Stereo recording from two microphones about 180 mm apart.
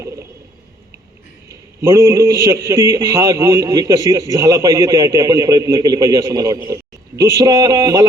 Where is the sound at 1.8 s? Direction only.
15° right (ahead or behind).